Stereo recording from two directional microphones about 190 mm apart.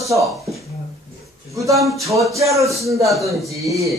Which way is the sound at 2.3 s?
15° right (ahead or behind).